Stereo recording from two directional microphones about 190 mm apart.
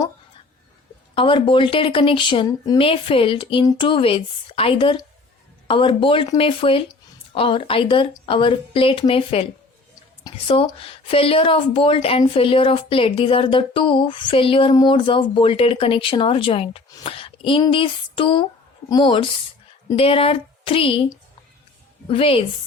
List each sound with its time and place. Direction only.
1.1 s a woman's voice: 25° left (ahead or behind)